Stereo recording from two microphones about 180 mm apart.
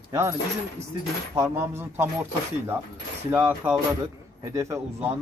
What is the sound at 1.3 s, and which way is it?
Speech, 15° right (ahead or behind).